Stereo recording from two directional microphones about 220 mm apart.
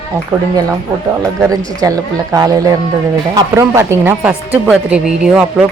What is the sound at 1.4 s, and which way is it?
Speech, 15° right (ahead or behind).